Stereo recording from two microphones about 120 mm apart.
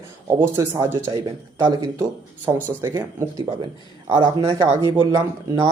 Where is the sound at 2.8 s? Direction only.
20° right (ahead or behind).